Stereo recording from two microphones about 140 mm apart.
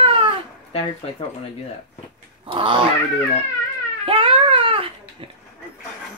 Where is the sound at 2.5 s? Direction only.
40° right (ahead or behind).